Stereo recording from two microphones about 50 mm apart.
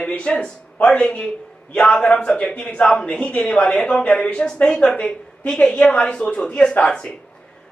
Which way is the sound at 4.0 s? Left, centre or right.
Left.